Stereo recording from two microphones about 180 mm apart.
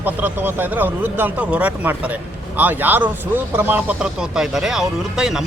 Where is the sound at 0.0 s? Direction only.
10° right (ahead or behind).